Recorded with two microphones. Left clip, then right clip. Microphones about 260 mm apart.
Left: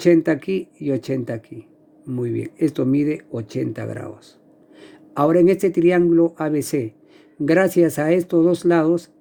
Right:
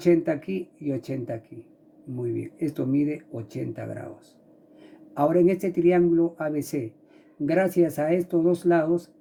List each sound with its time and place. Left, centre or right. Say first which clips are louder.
0.0 s speech: left 6 dB; left